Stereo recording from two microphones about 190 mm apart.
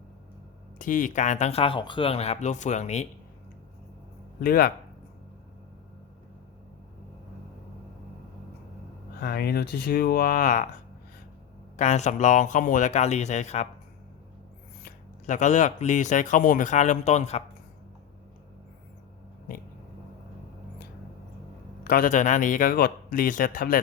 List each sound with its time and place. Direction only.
0.8 s speech: 45° left (ahead or behind)
4.4 s speech: 50° left (ahead or behind)
9.2 s speech: 55° left (ahead or behind)
11.8 s speech: 35° left (ahead or behind)
14.8 s speech: 40° left (ahead or behind)
21.8 s speech: 45° left (ahead or behind)